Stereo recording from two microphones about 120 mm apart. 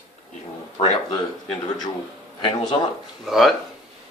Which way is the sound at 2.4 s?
45° left (ahead or behind).